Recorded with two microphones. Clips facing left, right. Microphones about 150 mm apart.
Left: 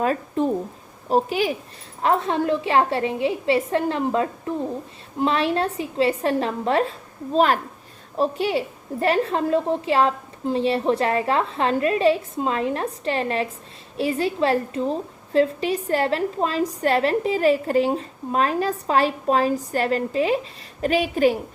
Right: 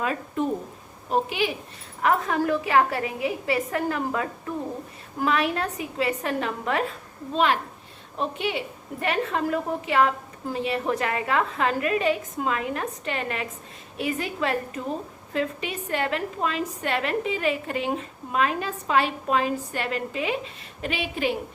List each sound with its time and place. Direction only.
0.0 s a woman's voice: 40° left (ahead or behind)
2.0 s a woman's voice: 30° left (ahead or behind)